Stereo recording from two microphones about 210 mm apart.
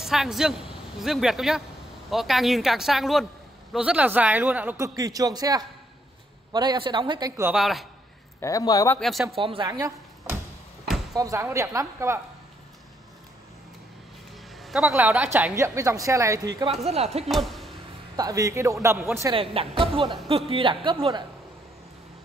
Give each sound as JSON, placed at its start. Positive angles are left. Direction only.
{"t": 0.0, "sound": "a woman's voice", "side_deg": 0}
{"t": 7.5, "sound": "speech", "side_deg": 0}
{"t": 8.4, "sound": "speech", "side_deg": 15}
{"t": 9.0, "sound": "speech", "side_deg": 0}
{"t": 9.3, "sound": "a woman's voice", "side_deg": -25}
{"t": 14.6, "sound": "a woman's voice", "side_deg": 0}
{"t": 16.6, "sound": "speech", "side_deg": -30}
{"t": 17.3, "sound": "speech", "side_deg": 0}
{"t": 18.1, "sound": "a woman's voice", "side_deg": -15}
{"t": 19.3, "sound": "speech", "side_deg": -25}